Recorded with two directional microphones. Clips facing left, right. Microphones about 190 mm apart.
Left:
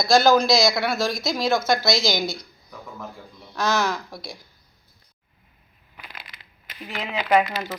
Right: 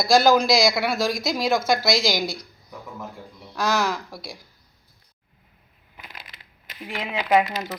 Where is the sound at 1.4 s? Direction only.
15° right (ahead or behind).